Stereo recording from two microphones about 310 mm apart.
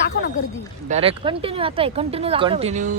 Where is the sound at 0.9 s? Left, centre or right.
Centre.